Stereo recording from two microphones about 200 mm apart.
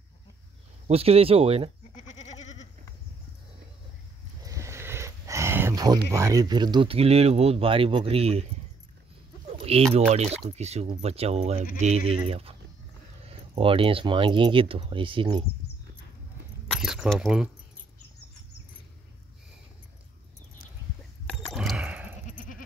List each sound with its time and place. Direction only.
0.8 s speech: 30° right (ahead or behind)
2.0 s goat: 35° left (ahead or behind)
4.5 s a sound: 15° right (ahead or behind)
6.1 s speech: 15° right (ahead or behind)
9.6 s bird: 30° right (ahead or behind)
10.1 s speech: 30° right (ahead or behind)
16.7 s speech: centre (ahead or behind)
21.3 s a sound: centre (ahead or behind)